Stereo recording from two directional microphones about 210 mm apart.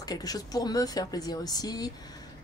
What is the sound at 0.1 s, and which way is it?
Speech, 15° left (ahead or behind).